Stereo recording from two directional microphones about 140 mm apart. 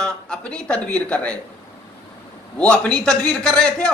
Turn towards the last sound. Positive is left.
turn(degrees=5)  # may be behind; listen again after turning